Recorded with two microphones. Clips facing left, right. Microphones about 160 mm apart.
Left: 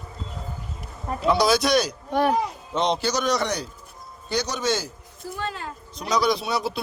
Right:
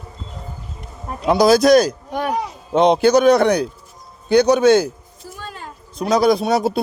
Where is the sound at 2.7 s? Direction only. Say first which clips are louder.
Right 13 dB; 55° right (ahead or behind).